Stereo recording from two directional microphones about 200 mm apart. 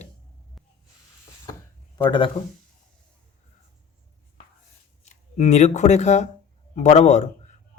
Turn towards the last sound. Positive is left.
turn(degrees=35)  # may be behind; listen again after turning